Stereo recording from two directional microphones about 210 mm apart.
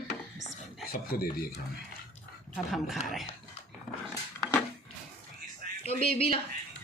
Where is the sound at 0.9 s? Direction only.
45° left (ahead or behind).